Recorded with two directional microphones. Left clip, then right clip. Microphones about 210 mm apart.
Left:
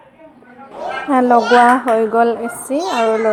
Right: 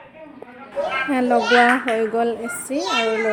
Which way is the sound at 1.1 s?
5° left (ahead or behind).